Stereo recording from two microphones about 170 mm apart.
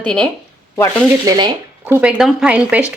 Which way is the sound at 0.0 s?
5° left (ahead or behind).